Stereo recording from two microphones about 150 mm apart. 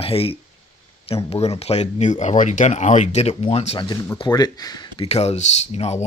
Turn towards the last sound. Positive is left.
turn(degrees=45)  # may be behind; listen again after turning